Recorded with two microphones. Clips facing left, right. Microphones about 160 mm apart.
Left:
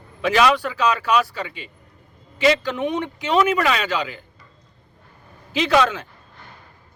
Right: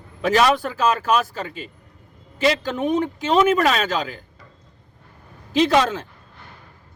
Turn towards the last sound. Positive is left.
turn(degrees=-35)  # may be behind; listen again after turning